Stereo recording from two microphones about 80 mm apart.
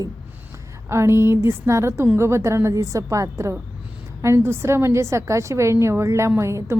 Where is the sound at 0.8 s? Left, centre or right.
Right.